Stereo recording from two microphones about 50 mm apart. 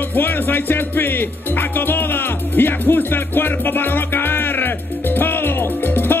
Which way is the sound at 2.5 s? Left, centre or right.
Left.